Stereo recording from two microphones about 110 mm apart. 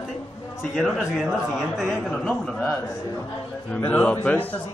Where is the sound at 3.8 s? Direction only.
15° left (ahead or behind).